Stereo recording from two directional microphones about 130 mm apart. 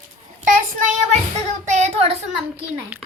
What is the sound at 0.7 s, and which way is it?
Speech, 75° right (ahead or behind).